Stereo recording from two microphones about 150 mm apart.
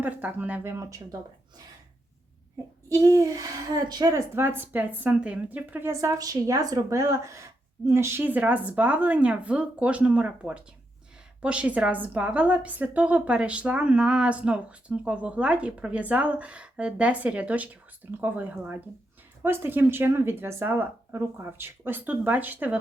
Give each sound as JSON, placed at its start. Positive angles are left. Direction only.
{"t": 0.0, "sound": "a woman's voice", "side_deg": -10}
{"t": 2.9, "sound": "a child's voice", "side_deg": -25}
{"t": 4.4, "sound": "a woman's voice", "side_deg": -15}